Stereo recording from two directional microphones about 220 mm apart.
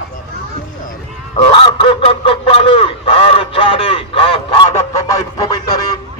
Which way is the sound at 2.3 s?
25° left (ahead or behind).